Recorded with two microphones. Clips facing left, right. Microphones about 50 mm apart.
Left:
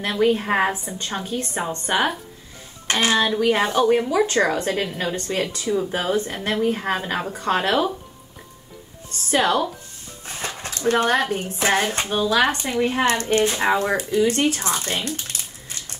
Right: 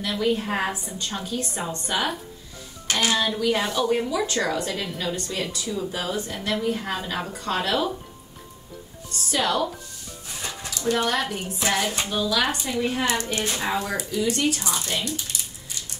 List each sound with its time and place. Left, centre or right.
0.0 s speech: left
9.3 s speech: left